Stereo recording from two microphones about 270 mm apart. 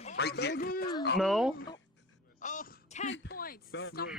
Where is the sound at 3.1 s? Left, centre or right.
Left.